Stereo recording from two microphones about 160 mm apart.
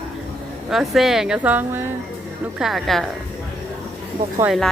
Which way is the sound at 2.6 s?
Centre (ahead or behind).